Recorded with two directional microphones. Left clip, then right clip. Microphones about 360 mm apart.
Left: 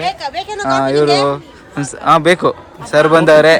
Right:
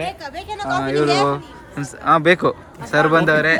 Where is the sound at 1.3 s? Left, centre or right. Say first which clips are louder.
Left 4 dB; centre.